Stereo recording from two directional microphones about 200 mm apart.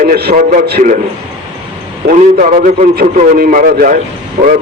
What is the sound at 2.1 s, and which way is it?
A man's voice, 40° right (ahead or behind).